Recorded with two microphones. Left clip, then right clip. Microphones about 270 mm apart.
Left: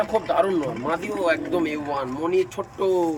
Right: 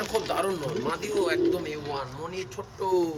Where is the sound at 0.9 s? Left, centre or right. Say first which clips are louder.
Left 5 dB; left.